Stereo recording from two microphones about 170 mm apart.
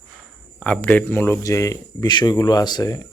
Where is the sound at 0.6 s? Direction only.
10° left (ahead or behind).